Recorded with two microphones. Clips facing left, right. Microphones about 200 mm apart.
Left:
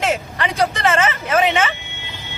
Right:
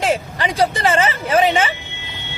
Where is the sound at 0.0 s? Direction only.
30° right (ahead or behind).